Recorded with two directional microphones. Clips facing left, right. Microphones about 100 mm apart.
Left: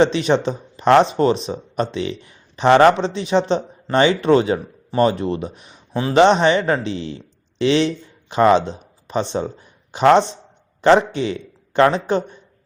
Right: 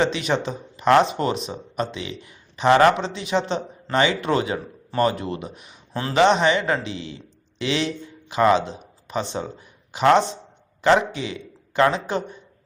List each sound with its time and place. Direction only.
0.0 s speech: 30° left (ahead or behind)
5.9 s speech: 15° left (ahead or behind)